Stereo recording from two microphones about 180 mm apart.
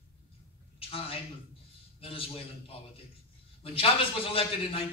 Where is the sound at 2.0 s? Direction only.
30° left (ahead or behind).